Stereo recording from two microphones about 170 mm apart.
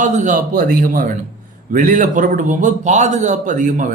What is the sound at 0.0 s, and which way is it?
A man's voice, 45° right (ahead or behind).